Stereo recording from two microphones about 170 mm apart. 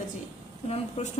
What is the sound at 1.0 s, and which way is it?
Speech, 40° left (ahead or behind).